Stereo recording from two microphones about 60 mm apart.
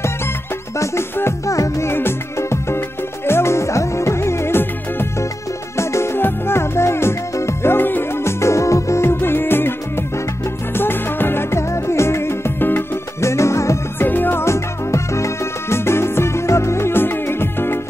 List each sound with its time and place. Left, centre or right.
1.4 s music: left
1.9 s music: left
5.8 s music: left
9.1 s music: left
13.2 s music: left
13.9 s music: left
14.4 s salsa music: left